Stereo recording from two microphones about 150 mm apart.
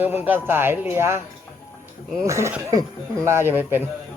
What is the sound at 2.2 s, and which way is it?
Speech, 20° right (ahead or behind).